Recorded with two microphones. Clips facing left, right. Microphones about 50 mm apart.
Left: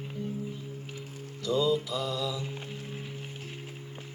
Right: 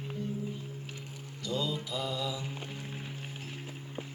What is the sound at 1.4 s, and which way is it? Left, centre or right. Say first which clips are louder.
Music: left 8 dB; centre.